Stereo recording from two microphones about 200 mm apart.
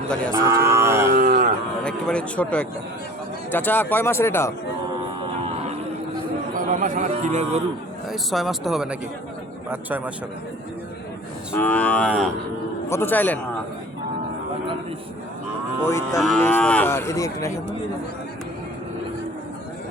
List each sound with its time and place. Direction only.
0.3 s a sound: 15° right (ahead or behind)
1.1 s livestock: 45° right (ahead or behind)
1.8 s speech: 5° left (ahead or behind)
3.5 s cattle: 10° left (ahead or behind)
6.6 s speech: 40° right (ahead or behind)
8.1 s speech: centre (ahead or behind)
11.5 s cattle: 10° left (ahead or behind)
15.9 s cattle: 15° left (ahead or behind)